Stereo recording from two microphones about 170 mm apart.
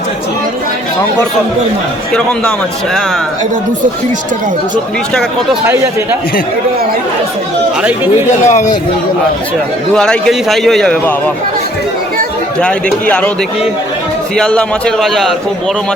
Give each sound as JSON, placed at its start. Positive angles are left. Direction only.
{"t": 8.4, "sound": "a man's voice", "side_deg": 45}
{"t": 9.9, "sound": "a man's voice", "side_deg": 5}
{"t": 12.5, "sound": "a man's voice", "side_deg": 5}
{"t": 14.3, "sound": "a man's voice", "side_deg": 5}